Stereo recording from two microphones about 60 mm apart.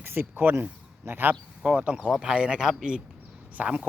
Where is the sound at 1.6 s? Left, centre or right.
Centre.